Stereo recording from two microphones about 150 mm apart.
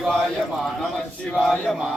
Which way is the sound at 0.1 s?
5° left (ahead or behind).